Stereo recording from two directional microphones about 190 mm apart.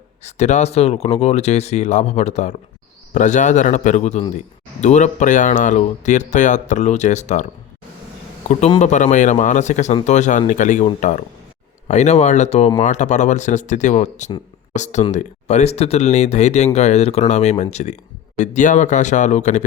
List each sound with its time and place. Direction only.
0.3 s a man's voice: 35° left (ahead or behind)
8.8 s a man's voice: 40° left (ahead or behind)
11.9 s a man's voice: 35° left (ahead or behind)